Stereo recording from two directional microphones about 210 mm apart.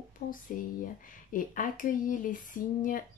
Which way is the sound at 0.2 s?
40° left (ahead or behind).